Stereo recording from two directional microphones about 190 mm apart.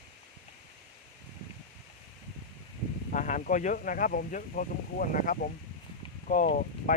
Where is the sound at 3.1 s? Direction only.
45° left (ahead or behind).